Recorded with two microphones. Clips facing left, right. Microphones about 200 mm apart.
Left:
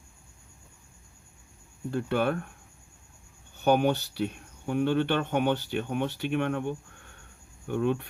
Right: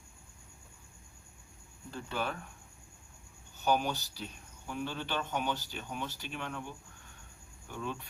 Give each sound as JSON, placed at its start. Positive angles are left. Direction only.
{"t": 1.9, "sound": "speech", "side_deg": 60}
{"t": 3.5, "sound": "speech", "side_deg": 60}